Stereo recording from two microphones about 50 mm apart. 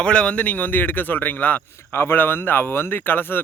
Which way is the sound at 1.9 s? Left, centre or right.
Left.